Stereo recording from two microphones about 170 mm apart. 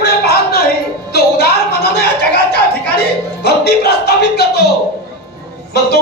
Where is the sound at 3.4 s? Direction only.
70° left (ahead or behind).